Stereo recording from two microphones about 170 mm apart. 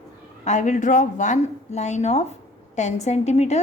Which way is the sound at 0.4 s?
45° left (ahead or behind).